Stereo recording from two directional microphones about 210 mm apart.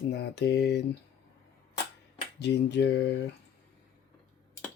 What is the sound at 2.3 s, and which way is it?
Speech, 55° left (ahead or behind).